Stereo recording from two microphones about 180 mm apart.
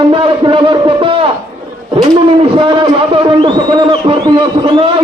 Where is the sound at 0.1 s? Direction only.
30° right (ahead or behind).